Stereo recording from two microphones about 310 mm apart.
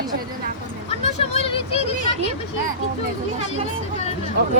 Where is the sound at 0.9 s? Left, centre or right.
Centre.